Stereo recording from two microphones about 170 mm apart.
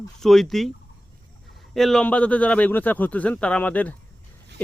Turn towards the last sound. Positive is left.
turn(degrees=10)  # may be behind; listen again after turning